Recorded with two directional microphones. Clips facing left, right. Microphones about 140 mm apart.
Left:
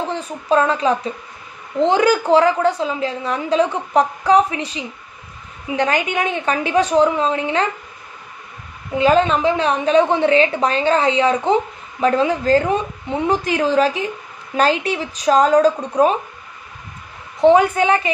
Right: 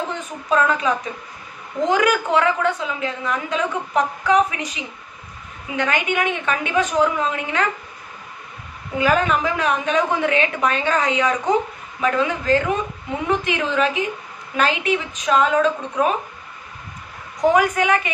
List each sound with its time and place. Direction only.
0.1 s a woman's voice: 35° left (ahead or behind)
8.9 s a woman's voice: 25° left (ahead or behind)
17.4 s a woman's voice: 30° left (ahead or behind)